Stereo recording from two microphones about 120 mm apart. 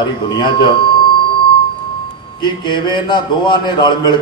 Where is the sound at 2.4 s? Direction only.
40° left (ahead or behind).